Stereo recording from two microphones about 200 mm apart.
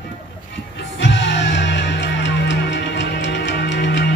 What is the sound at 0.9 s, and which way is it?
Music, 65° left (ahead or behind).